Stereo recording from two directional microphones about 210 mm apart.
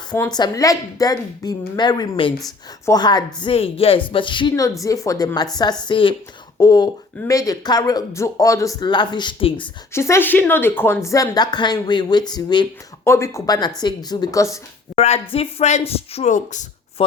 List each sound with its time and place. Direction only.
0.1 s a woman's voice: 20° left (ahead or behind)
9.9 s speech: 10° left (ahead or behind)
14.9 s a woman's voice: 30° left (ahead or behind)